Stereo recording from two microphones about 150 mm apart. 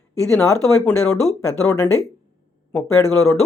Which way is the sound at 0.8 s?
5° left (ahead or behind).